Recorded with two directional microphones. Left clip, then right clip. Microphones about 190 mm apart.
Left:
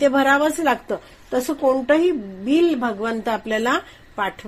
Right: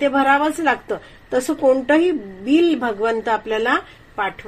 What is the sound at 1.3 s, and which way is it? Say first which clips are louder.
A woman's voice: right 3 dB; 15° left (ahead or behind).